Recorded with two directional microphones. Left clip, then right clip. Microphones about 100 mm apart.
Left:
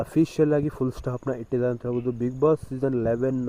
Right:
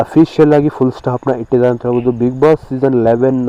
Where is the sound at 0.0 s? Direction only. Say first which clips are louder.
Right 13 dB; 20° left (ahead or behind).